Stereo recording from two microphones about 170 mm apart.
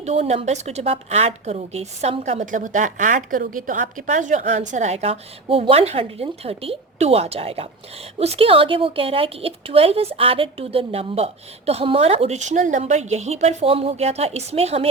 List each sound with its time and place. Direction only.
0.0 s a woman's voice: 40° right (ahead or behind)